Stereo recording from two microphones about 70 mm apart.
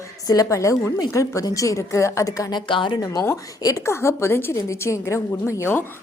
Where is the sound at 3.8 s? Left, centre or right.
Left.